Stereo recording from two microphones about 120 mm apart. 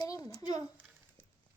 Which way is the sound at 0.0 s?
30° left (ahead or behind).